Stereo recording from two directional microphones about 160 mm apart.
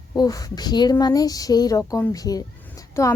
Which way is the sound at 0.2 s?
25° left (ahead or behind).